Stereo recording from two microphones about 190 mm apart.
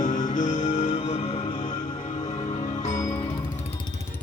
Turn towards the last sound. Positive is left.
turn(degrees=15)  # may be behind; listen again after turning